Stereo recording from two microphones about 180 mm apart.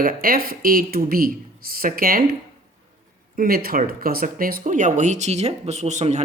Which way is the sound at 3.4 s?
55° right (ahead or behind).